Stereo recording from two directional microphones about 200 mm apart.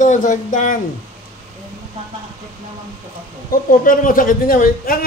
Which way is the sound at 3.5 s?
45° left (ahead or behind).